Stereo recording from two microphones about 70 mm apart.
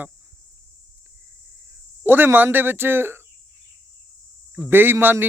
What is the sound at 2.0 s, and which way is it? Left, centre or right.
Speech, right.